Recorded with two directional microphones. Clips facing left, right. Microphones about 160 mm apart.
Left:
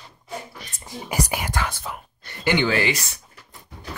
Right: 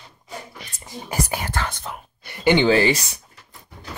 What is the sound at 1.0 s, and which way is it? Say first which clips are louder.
Speech: even; 10° left (ahead or behind).